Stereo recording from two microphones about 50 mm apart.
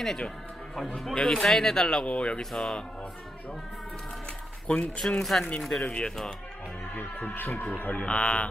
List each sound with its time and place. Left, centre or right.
0.0 s speech: centre
2.0 s speech: left
2.5 s speech: centre
4.7 s speech: left
5.2 s speech: centre
5.9 s speech: centre
6.9 s speech: left
8.0 s speech: left